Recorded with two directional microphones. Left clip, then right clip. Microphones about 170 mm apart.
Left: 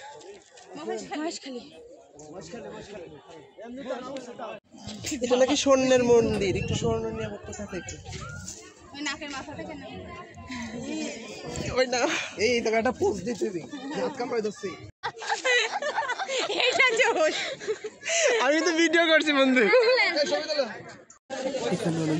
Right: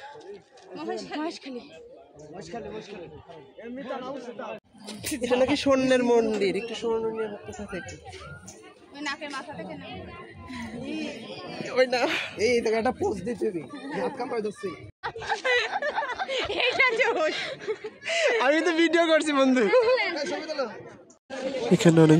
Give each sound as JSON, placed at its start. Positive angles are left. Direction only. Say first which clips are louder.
{"t": 0.7, "sound": "a man's voice", "louder": "right 1 dB", "side_deg": 0}
{"t": 4.8, "sound": "speech", "louder": "even", "side_deg": -60}
{"t": 5.4, "sound": "a man's voice", "louder": "left 2 dB", "side_deg": -5}
{"t": 8.9, "sound": "a sound", "louder": "even", "side_deg": -10}
{"t": 10.5, "sound": "speech", "louder": "left 1 dB", "side_deg": 0}
{"t": 12.4, "sound": "speech", "louder": "even", "side_deg": -20}
{"t": 13.2, "sound": "a man's voice", "louder": "right 1 dB", "side_deg": -10}
{"t": 15.0, "sound": "a sound", "louder": "even", "side_deg": 10}
{"t": 17.4, "sound": "a sound", "louder": "left 1 dB", "side_deg": 5}
{"t": 18.4, "sound": "speech", "louder": "right 1 dB", "side_deg": -15}
{"t": 19.9, "sound": "a sound", "louder": "left 2 dB", "side_deg": -5}
{"t": 20.4, "sound": "speech", "louder": "left 3 dB", "side_deg": -20}